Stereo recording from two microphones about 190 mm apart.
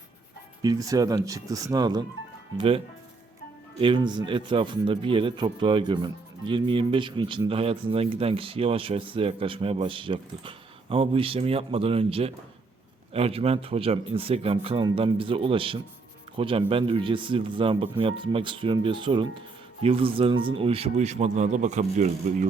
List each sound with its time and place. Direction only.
0.6 s a man's voice: 20° right (ahead or behind); by 22.4 s 40° right (ahead or behind)